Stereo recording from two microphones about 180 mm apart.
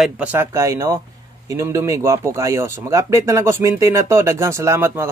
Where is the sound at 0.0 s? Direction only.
10° right (ahead or behind).